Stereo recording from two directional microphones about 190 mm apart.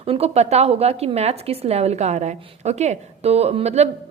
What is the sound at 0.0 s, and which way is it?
A woman's voice, 30° right (ahead or behind).